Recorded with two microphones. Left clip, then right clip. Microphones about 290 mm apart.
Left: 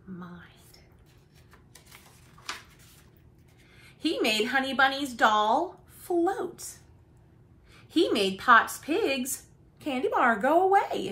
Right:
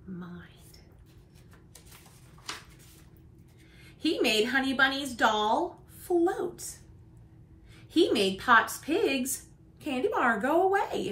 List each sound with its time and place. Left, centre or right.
0.2 s whispering: centre
3.8 s a woman's voice: centre
7.7 s a woman's voice: centre